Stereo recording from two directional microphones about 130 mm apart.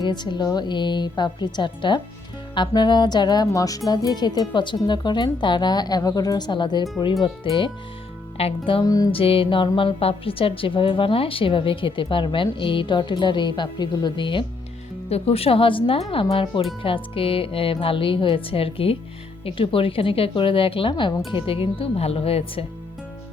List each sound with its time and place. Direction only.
0.0 s a woman's voice: 35° left (ahead or behind)
8.8 s music: 30° left (ahead or behind)
9.1 s a woman's voice: 45° left (ahead or behind)
15.1 s a woman's voice: 50° left (ahead or behind)